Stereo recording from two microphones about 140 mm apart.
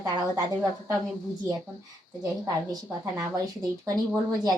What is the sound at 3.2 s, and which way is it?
A woman's voice, 25° right (ahead or behind).